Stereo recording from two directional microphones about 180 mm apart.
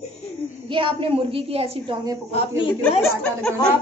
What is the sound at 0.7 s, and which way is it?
A woman's voice, 30° right (ahead or behind).